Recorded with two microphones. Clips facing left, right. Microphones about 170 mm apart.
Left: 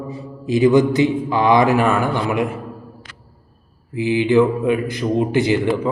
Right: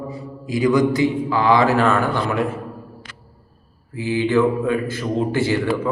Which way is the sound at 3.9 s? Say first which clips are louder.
Left 3 dB; 15° left (ahead or behind).